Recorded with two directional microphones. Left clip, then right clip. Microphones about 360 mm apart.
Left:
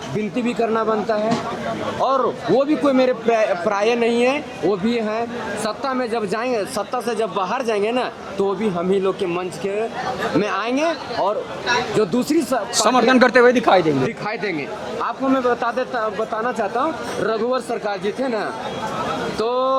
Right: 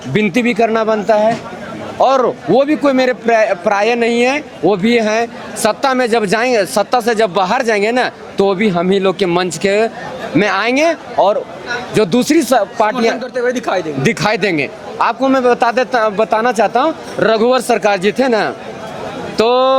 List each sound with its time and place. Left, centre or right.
0.3 s a man's voice: right
12.7 s speech: left
13.4 s speech: centre
14.1 s a man's voice: right